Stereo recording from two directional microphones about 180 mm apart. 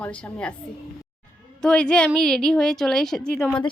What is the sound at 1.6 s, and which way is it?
A woman's voice, 5° left (ahead or behind).